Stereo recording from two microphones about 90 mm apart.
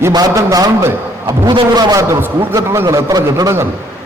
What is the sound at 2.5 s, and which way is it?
Speech, 30° right (ahead or behind).